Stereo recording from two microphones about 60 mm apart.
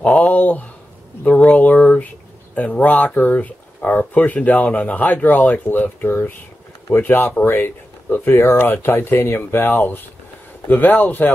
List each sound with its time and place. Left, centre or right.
0.0 s speech: left